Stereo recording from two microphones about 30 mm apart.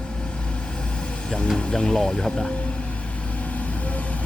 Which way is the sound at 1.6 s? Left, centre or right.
Left.